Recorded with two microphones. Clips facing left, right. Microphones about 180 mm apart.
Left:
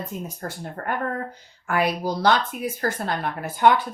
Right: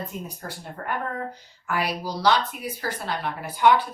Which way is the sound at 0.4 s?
50° left (ahead or behind).